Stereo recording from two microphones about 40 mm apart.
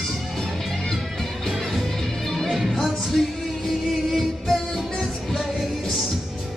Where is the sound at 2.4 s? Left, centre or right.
Centre.